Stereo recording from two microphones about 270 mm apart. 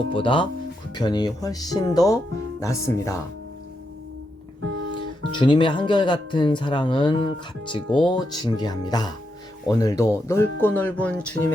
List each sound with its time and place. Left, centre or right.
0.1 s speech: centre
4.6 s music: right
5.4 s speech: centre